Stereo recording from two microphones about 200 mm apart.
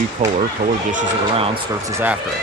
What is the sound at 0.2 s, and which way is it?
Speech, 35° right (ahead or behind).